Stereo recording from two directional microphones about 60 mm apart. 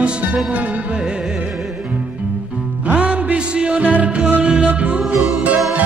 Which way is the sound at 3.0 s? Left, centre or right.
Right.